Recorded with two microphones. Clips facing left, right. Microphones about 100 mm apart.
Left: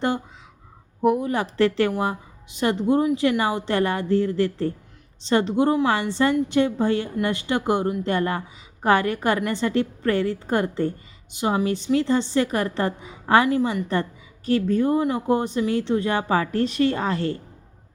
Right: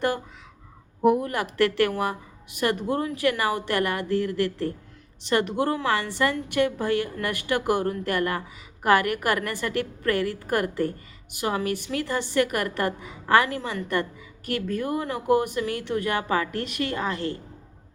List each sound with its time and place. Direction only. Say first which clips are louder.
1.0 s speech: even; centre (ahead or behind)
1.3 s a woman's voice: left 3 dB; 30° left (ahead or behind)